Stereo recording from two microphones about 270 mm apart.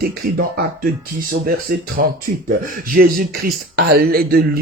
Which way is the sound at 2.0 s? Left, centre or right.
Right.